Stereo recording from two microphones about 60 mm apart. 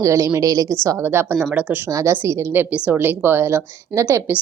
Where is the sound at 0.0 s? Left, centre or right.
Right.